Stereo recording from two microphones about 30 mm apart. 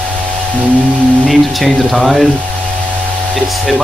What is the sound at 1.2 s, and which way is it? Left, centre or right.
Speech, centre.